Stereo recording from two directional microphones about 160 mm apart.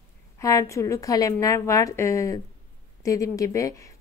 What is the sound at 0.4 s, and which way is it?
Speech, 20° left (ahead or behind).